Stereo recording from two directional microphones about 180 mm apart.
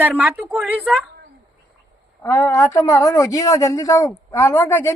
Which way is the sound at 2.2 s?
15° left (ahead or behind).